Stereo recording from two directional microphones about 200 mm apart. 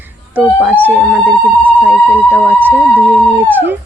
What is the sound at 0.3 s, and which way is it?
Speech, 10° right (ahead or behind).